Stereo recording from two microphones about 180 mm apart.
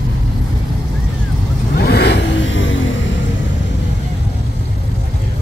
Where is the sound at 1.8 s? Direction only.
65° left (ahead or behind); by 2.9 s 90° left.